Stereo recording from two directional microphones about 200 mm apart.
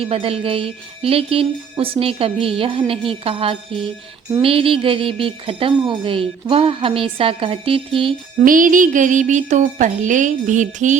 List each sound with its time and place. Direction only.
0.0 s speech: 30° right (ahead or behind)
8.4 s speech: 40° right (ahead or behind)